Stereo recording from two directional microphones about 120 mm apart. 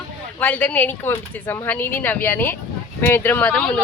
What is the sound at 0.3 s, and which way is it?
Speech, 15° left (ahead or behind).